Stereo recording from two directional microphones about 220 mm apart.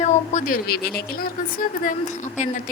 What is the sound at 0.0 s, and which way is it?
A woman's voice, 35° left (ahead or behind).